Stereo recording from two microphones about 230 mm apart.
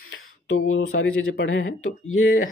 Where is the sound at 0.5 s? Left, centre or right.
Left.